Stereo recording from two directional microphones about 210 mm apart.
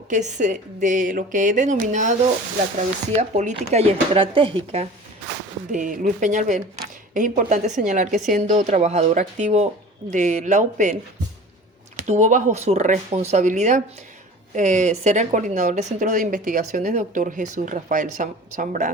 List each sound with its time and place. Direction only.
0.1 s speech: 35° right (ahead or behind)
5.7 s speech: 40° right (ahead or behind)
11.9 s speech: 35° right (ahead or behind)